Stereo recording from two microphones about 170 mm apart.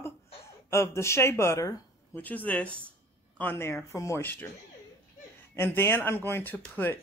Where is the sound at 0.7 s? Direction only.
15° left (ahead or behind).